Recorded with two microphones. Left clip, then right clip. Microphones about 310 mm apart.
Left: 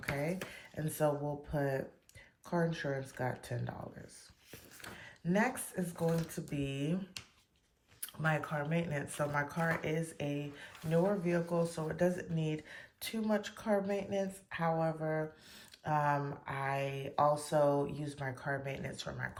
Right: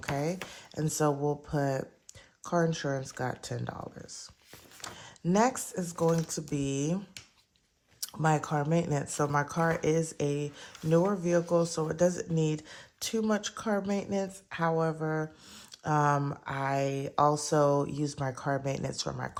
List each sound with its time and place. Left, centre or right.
0.0 s speech: centre
4.8 s speech: centre
8.0 s speech: centre